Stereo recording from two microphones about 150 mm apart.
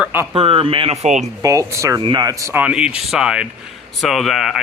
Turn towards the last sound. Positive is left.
turn(degrees=0)  # may be behind; listen again after turning